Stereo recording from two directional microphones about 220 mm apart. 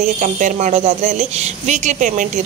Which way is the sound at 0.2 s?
35° right (ahead or behind).